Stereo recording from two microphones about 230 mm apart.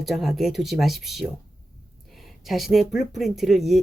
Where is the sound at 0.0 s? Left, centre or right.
Centre.